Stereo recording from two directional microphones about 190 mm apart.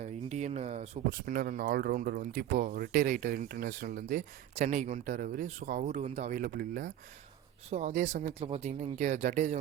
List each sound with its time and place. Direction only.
0.0 s speech: 35° right (ahead or behind)
1.1 s speech: 50° right (ahead or behind)